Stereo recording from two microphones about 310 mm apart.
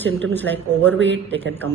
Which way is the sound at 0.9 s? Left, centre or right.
Right.